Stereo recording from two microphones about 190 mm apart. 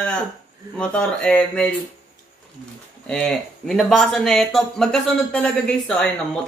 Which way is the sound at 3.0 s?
5° left (ahead or behind).